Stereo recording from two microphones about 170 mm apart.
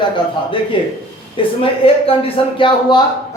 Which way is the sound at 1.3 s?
30° left (ahead or behind).